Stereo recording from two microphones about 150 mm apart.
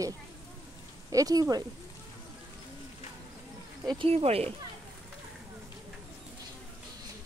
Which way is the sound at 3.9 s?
35° right (ahead or behind).